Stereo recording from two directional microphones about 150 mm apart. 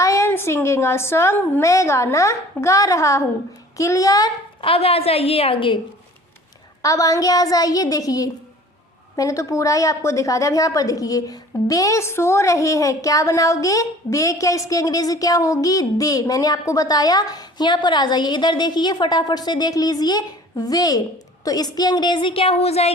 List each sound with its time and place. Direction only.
0.0 s a woman's voice: 20° left (ahead or behind)
4.6 s a woman's voice: 40° left (ahead or behind)
6.8 s a woman's voice: 25° left (ahead or behind); by 22.9 s 45° left (ahead or behind)